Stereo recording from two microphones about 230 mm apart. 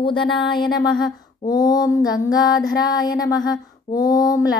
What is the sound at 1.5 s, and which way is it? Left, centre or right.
Speech, centre.